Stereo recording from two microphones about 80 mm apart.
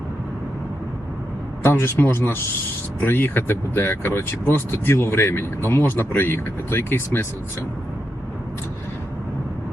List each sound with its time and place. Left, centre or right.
1.6 s speech: left